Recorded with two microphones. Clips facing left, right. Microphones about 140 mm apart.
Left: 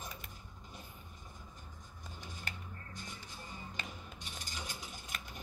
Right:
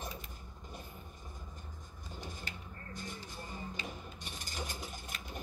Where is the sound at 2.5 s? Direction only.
55° left (ahead or behind).